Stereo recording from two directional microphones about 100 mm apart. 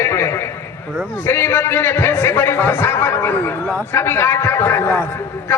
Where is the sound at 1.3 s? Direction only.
25° left (ahead or behind).